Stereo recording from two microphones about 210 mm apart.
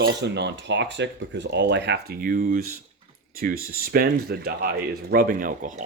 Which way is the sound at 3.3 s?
45° right (ahead or behind).